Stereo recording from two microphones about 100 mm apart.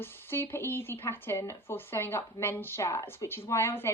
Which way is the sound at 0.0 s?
20° left (ahead or behind).